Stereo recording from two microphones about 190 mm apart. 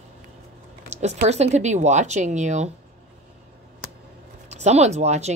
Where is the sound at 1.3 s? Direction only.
35° right (ahead or behind).